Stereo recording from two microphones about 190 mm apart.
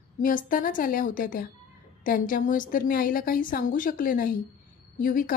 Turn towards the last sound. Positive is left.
turn(degrees=45)  # may be behind; listen again after turning